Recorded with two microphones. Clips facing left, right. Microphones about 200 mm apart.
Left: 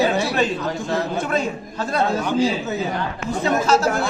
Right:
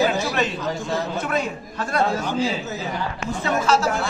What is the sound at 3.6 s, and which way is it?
Speech, 40° left (ahead or behind).